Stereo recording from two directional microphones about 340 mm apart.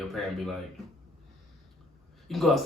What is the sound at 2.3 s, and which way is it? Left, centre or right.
Speech, centre.